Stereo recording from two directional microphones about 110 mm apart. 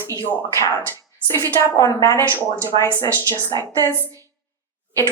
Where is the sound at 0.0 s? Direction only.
25° left (ahead or behind).